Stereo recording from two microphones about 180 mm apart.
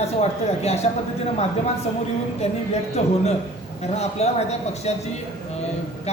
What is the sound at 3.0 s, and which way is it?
A man's voice, 40° left (ahead or behind).